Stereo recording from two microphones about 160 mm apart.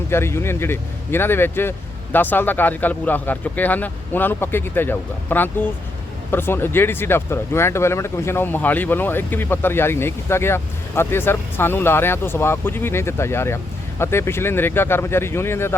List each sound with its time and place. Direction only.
0.1 s speech: 15° left (ahead or behind)